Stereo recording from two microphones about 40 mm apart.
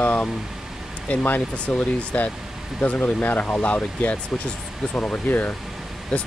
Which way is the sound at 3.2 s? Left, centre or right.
Left.